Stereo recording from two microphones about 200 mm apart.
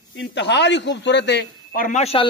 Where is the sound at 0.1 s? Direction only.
60° left (ahead or behind).